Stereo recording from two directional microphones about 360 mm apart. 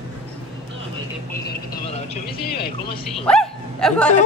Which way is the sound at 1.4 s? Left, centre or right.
Left.